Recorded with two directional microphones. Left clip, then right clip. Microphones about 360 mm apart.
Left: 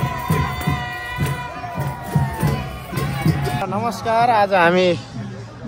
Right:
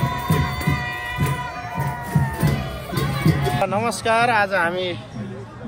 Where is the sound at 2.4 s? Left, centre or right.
Centre.